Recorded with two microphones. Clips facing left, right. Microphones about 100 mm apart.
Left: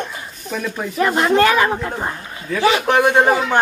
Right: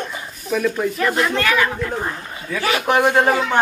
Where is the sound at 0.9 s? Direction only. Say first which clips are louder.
Left 4 dB; 30° left (ahead or behind).